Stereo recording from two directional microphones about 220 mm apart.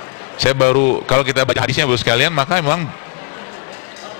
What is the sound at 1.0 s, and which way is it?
A man's voice, 25° left (ahead or behind).